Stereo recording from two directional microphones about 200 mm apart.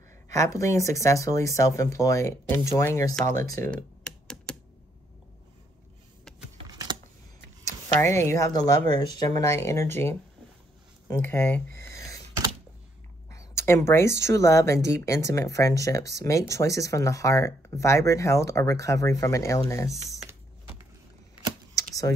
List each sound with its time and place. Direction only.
0.3 s speech: 15° left (ahead or behind)
3.4 s computer keyboard: 15° left (ahead or behind)
6.7 s computer keyboard: 20° right (ahead or behind)
7.6 s speech: 15° left (ahead or behind)
11.1 s a sound: 10° left (ahead or behind)
13.3 s a sound: 15° left (ahead or behind)
14.2 s speech: 15° left (ahead or behind)